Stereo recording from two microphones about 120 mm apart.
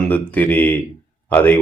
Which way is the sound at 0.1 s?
15° left (ahead or behind).